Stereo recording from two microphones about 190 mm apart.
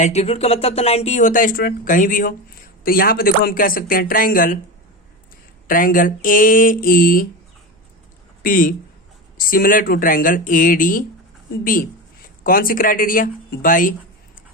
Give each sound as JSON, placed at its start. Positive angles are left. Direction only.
{"t": 0.0, "sound": "speech", "side_deg": 35}
{"t": 5.6, "sound": "speech", "side_deg": 45}
{"t": 8.4, "sound": "speech", "side_deg": 45}